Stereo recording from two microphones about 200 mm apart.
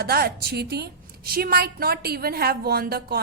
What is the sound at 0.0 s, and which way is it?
A woman's voice, 50° right (ahead or behind).